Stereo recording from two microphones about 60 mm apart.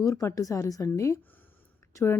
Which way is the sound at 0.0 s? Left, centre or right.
Left.